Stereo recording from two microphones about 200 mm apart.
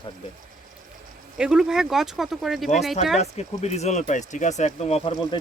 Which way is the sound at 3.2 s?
35° left (ahead or behind).